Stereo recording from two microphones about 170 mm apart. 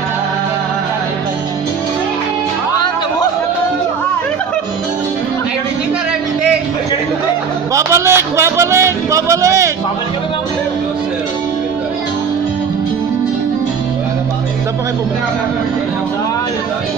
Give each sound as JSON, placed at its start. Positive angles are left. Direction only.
{"t": 7.7, "sound": "music", "side_deg": -15}